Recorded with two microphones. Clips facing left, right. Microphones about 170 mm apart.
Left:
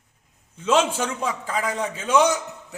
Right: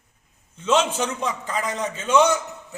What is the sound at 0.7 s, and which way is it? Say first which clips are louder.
A man's voice: even; 10° left (ahead or behind).